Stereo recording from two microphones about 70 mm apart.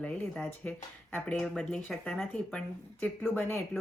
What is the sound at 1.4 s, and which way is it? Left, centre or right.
Speech, centre.